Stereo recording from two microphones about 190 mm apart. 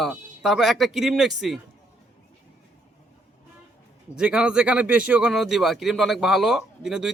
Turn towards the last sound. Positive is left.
turn(degrees=0)  # may be behind; listen again after turning